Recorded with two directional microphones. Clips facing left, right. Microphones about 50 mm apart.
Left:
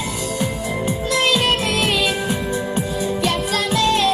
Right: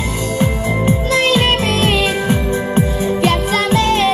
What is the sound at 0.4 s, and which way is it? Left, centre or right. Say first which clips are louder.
Music: right 7 dB; right.